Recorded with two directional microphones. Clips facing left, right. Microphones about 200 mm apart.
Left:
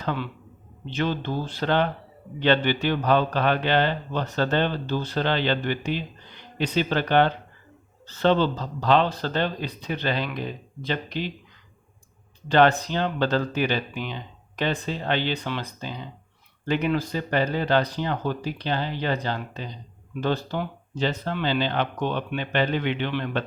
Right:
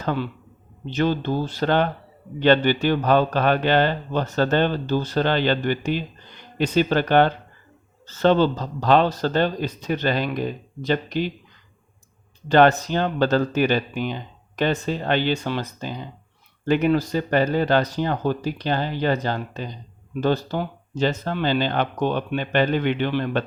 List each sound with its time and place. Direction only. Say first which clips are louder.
0.0 s a man's voice: right 4 dB; 45° right (ahead or behind)
12.5 s a man's voice: right 3 dB; 45° right (ahead or behind)